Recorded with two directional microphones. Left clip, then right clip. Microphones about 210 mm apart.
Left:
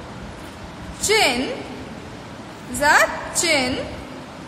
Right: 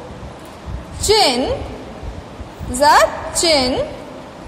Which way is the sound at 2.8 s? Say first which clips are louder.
Right 5 dB; 15° right (ahead or behind).